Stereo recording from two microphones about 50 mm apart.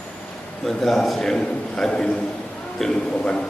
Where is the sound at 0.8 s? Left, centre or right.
Centre.